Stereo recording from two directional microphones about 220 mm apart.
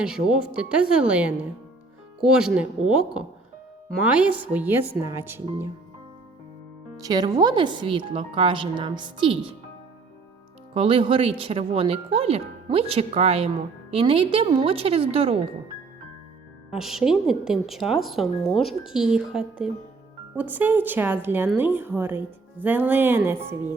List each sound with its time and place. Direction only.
0.0 s a woman's voice: 5° right (ahead or behind)
6.9 s speech: 15° right (ahead or behind)
10.8 s speech: 25° right (ahead or behind)
16.7 s a woman's voice: centre (ahead or behind)